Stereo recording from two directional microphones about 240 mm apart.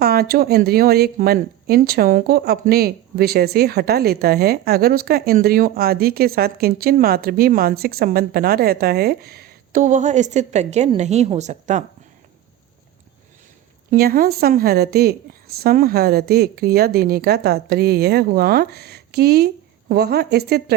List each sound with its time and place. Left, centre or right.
0.0 s speech: right
13.9 s speech: right